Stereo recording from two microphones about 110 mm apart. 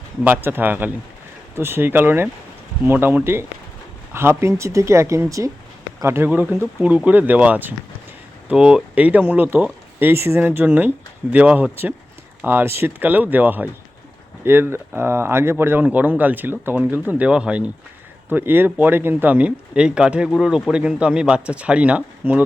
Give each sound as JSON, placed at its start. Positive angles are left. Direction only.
{"t": 0.3, "sound": "speech", "side_deg": -20}